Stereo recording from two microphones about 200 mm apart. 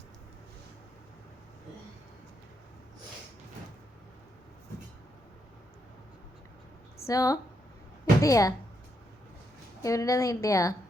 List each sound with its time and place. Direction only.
7.1 s a woman's voice: 15° left (ahead or behind)
9.8 s a woman's voice: 15° left (ahead or behind)